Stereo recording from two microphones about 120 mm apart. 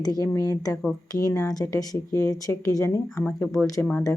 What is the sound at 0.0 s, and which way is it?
Speech, 30° left (ahead or behind).